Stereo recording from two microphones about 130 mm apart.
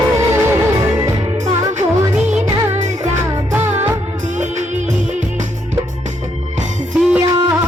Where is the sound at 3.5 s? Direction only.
15° right (ahead or behind).